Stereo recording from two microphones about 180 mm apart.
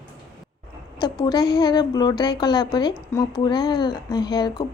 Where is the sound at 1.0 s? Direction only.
20° left (ahead or behind).